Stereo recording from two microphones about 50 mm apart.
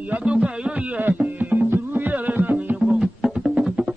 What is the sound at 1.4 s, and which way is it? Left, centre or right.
Music, right.